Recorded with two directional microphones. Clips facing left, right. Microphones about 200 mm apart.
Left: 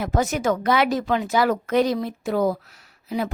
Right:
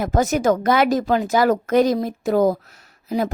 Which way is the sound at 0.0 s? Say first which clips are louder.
Right 4 dB; 45° right (ahead or behind).